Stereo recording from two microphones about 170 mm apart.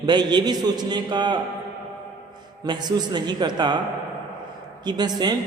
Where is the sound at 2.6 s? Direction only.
25° right (ahead or behind).